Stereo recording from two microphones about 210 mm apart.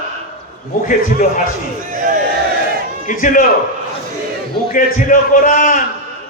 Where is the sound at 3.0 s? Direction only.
40° left (ahead or behind).